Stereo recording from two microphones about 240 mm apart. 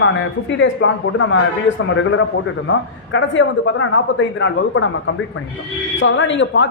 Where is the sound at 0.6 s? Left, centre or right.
Left.